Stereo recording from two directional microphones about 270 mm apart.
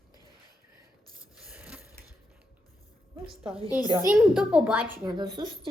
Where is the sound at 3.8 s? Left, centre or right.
Centre.